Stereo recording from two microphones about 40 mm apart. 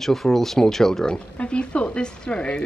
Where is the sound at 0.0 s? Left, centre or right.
Centre.